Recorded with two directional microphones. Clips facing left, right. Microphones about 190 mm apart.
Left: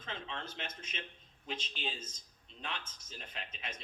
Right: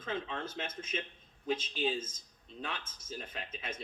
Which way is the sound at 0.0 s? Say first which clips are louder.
Right 6 dB; 45° right (ahead or behind).